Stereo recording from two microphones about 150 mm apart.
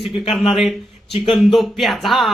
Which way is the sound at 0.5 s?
Centre (ahead or behind).